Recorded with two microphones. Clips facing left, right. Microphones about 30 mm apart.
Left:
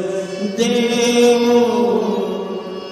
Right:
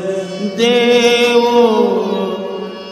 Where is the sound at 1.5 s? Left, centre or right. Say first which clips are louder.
Right 3 dB; right.